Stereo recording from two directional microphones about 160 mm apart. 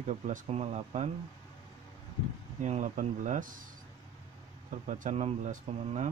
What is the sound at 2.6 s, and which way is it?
Speech, 50° right (ahead or behind).